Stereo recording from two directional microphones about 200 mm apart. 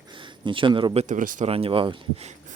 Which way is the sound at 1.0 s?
40° right (ahead or behind).